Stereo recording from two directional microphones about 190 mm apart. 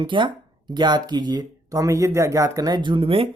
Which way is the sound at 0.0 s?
25° right (ahead or behind).